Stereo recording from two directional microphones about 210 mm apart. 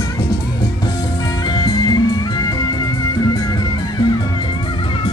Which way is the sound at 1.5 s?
20° left (ahead or behind).